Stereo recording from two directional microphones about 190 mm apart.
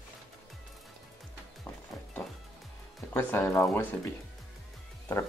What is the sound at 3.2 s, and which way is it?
Speech, 10° left (ahead or behind).